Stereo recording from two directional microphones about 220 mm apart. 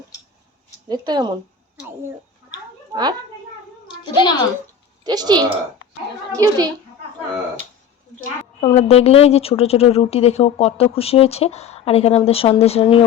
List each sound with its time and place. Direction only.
0.9 s speech: 20° right (ahead or behind)
2.9 s a child's voice: 20° right (ahead or behind)
3.8 s a child's voice: 20° left (ahead or behind)
5.0 s a woman's voice: 20° right (ahead or behind)
8.6 s speech: 25° left (ahead or behind)